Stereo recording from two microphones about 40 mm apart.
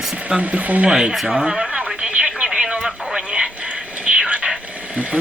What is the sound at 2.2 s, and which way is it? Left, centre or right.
Radio, centre.